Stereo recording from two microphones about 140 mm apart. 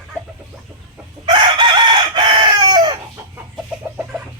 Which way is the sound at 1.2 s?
35° right (ahead or behind).